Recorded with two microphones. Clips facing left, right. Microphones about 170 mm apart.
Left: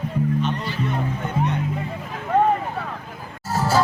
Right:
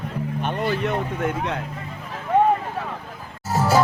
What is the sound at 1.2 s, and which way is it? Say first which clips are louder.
Speech: even; 90° right.